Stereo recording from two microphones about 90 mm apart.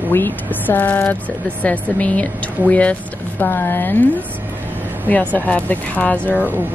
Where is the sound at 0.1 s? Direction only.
20° left (ahead or behind).